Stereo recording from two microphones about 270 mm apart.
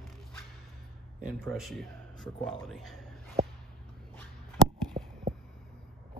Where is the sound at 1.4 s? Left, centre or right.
Centre.